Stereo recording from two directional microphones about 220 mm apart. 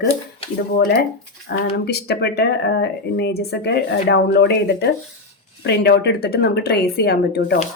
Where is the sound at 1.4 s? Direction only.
45° left (ahead or behind).